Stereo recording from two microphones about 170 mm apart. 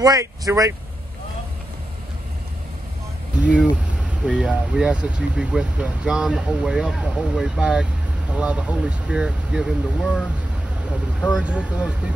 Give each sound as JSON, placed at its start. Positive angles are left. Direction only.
{"t": 0.0, "sound": "speech", "side_deg": -20}
{"t": 3.3, "sound": "a sound", "side_deg": -5}
{"t": 4.3, "sound": "speech", "side_deg": -5}
{"t": 11.3, "sound": "speech", "side_deg": -5}